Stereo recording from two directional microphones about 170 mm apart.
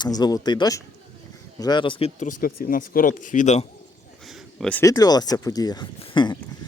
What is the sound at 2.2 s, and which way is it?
Speech, 55° left (ahead or behind).